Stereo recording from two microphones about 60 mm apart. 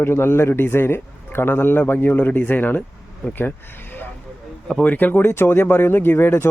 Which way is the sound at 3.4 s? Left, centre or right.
Left.